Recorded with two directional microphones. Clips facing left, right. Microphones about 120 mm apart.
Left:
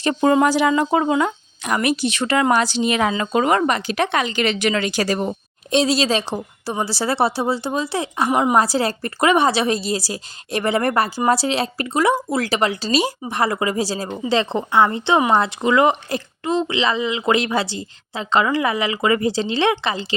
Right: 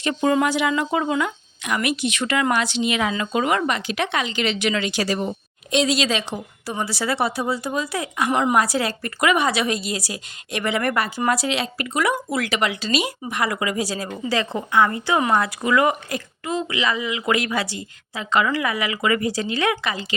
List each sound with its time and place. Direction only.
0.0 s a woman's voice: 35° left (ahead or behind)
5.7 s a woman's voice: 35° left (ahead or behind)
8.3 s a woman's voice: 15° left (ahead or behind)
8.5 s a woman's voice: 30° left (ahead or behind)